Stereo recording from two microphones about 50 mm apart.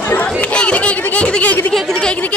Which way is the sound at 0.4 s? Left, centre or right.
Left.